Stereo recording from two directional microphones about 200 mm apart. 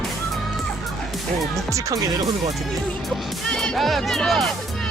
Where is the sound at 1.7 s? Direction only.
15° right (ahead or behind).